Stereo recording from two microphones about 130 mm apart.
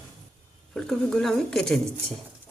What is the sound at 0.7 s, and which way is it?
A woman's voice, 5° left (ahead or behind).